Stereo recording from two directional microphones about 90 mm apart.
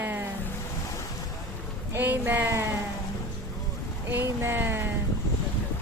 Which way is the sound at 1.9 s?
20° right (ahead or behind).